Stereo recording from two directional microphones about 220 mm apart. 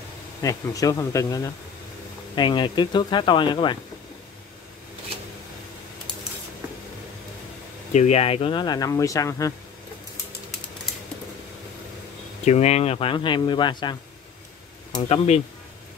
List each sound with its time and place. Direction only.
0.4 s speech: 15° left (ahead or behind)
7.9 s speech: 30° left (ahead or behind); by 9.5 s 15° left (ahead or behind)
12.4 s speech: 30° left (ahead or behind)
15.0 s speech: 25° left (ahead or behind)